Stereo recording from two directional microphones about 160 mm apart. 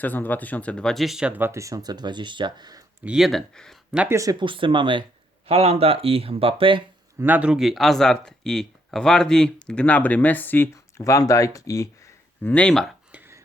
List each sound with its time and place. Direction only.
0.0 s speech: 10° left (ahead or behind); by 2.8 s 25° right (ahead or behind)
3.0 s speech: 5° right (ahead or behind)
3.9 s speech: 10° right (ahead or behind)
4.2 s speech: 25° right (ahead or behind)
7.2 s speech: 10° right (ahead or behind)
13.1 s a sound: 10° right (ahead or behind)